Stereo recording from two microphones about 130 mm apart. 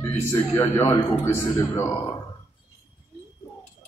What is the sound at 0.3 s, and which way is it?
A man's voice, 15° left (ahead or behind).